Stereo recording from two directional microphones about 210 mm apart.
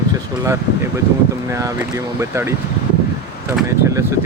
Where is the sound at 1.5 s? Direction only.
15° right (ahead or behind).